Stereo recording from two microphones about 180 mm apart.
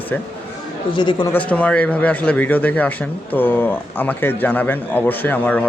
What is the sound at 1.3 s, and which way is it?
Speech, 10° left (ahead or behind).